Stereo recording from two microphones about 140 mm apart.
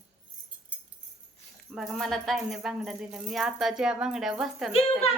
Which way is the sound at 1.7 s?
Centre (ahead or behind).